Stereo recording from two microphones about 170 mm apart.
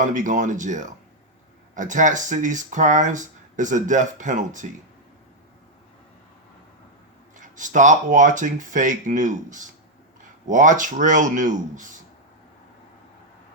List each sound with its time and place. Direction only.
0.0 s speech: 50° right (ahead or behind)
7.3 s speech: 50° right (ahead or behind)